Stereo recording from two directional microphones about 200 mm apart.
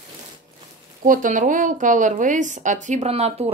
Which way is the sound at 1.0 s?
40° right (ahead or behind).